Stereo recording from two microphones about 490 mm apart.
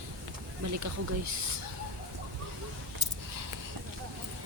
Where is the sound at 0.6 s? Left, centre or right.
Right.